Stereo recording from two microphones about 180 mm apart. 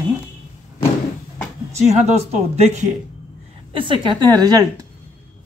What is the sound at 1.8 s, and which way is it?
Speech, 40° right (ahead or behind).